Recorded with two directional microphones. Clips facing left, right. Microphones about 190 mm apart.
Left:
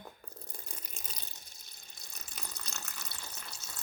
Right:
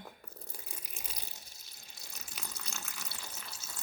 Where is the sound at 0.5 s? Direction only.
5° right (ahead or behind).